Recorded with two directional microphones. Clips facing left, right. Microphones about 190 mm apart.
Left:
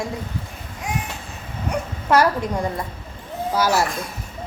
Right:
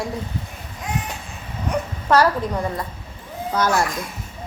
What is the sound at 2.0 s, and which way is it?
Speech, 15° left (ahead or behind).